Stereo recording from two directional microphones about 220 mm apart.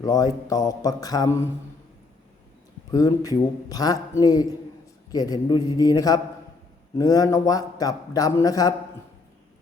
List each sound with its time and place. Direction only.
0.0 s a man's voice: 15° left (ahead or behind)
2.9 s a man's voice: 15° left (ahead or behind)